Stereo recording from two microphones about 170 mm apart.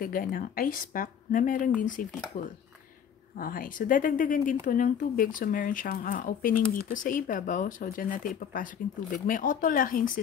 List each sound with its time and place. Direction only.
0.0 s a woman's voice: 55° left (ahead or behind)
3.3 s speech: 55° left (ahead or behind)